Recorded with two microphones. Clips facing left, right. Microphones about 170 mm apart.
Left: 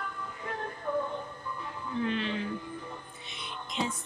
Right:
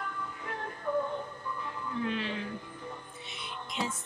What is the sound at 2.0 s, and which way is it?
Speech, 5° right (ahead or behind).